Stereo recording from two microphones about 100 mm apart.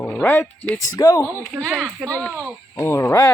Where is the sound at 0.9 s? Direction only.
35° left (ahead or behind).